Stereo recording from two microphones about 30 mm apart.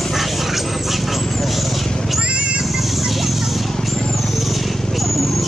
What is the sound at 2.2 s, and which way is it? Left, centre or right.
Music, right.